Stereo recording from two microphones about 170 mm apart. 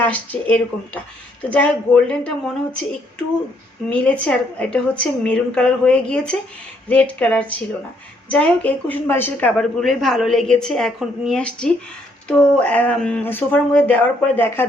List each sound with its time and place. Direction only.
0.0 s a woman's voice: 10° left (ahead or behind)
9.8 s a woman's voice: centre (ahead or behind)